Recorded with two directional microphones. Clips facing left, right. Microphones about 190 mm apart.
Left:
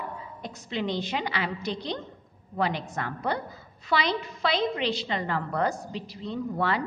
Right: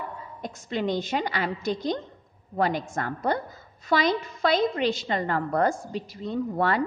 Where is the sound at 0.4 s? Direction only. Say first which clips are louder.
Right 3 dB; 45° right (ahead or behind).